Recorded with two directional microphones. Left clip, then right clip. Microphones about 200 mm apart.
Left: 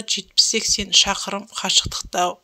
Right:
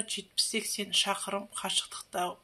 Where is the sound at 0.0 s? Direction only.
35° left (ahead or behind).